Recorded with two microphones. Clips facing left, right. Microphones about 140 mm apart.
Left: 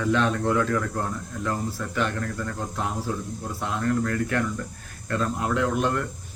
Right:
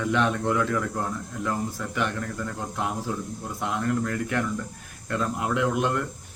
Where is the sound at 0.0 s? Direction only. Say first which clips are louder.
Left 1 dB; 15° right (ahead or behind).